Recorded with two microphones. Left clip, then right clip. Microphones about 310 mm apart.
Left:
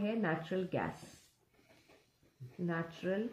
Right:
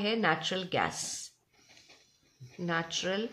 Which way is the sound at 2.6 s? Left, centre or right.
Right.